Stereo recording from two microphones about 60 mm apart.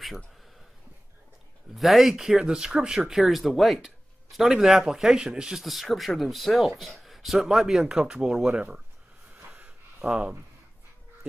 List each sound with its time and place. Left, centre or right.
1.8 s speech: centre
9.5 s a sound: right
10.0 s speech: centre